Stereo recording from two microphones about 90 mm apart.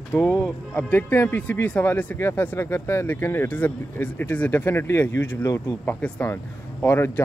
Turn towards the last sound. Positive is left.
turn(degrees=25)  # may be behind; listen again after turning